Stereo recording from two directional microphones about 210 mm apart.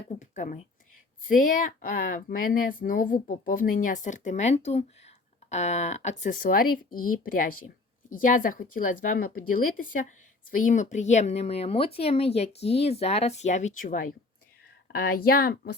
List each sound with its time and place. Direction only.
0.1 s a sound: 35° left (ahead or behind)
1.3 s speech: 40° left (ahead or behind)
6.7 s speech: 90° left
7.1 s a woman's voice: 40° left (ahead or behind)